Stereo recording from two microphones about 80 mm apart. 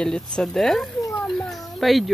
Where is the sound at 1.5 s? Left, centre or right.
Centre.